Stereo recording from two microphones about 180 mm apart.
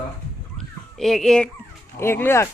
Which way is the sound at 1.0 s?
Centre (ahead or behind).